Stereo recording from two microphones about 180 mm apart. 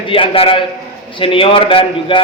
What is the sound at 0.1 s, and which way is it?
A man's voice, 30° left (ahead or behind).